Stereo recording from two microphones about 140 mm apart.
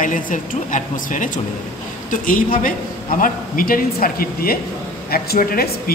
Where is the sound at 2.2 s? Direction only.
80° left.